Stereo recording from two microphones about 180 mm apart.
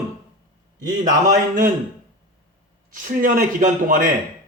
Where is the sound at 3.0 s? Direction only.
50° right (ahead or behind).